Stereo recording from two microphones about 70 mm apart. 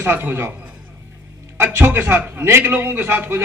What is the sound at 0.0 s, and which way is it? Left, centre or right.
Speech, right.